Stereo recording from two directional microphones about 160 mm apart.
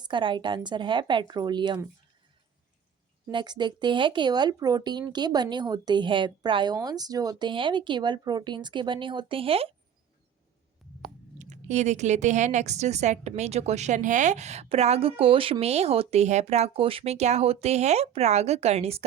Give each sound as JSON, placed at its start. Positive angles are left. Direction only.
{"t": 0.0, "sound": "speech", "side_deg": -30}
{"t": 3.3, "sound": "speech", "side_deg": -25}
{"t": 10.8, "sound": "a sound", "side_deg": 0}
{"t": 11.3, "sound": "a woman's voice", "side_deg": -45}